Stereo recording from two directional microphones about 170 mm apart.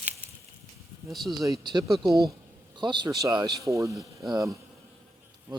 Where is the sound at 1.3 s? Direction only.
25° right (ahead or behind).